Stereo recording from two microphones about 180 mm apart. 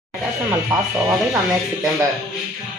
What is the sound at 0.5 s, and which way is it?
Speech, 15° right (ahead or behind).